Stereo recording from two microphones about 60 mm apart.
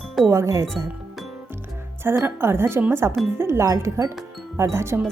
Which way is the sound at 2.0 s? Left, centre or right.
Right.